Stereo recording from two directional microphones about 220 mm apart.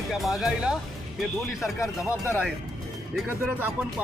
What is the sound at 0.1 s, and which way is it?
Speech, centre (ahead or behind).